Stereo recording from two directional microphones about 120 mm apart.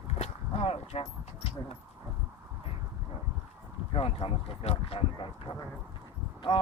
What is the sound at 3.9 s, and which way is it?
Speech, 50° left (ahead or behind).